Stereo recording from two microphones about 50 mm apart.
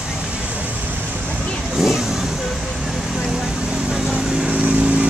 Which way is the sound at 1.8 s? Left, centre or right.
Centre.